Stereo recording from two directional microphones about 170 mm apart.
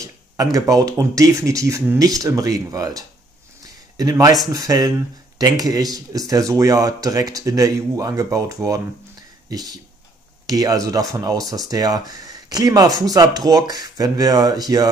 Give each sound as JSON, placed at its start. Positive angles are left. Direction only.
{"t": 0.0, "sound": "speech", "side_deg": -20}